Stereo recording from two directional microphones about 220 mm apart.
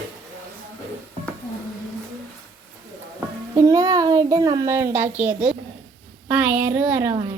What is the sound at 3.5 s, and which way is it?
A child's voice, 15° right (ahead or behind).